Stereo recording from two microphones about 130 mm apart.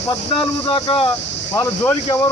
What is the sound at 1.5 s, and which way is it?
Speech, 15° left (ahead or behind).